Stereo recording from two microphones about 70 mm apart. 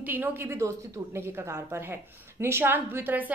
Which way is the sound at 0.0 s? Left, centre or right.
Right.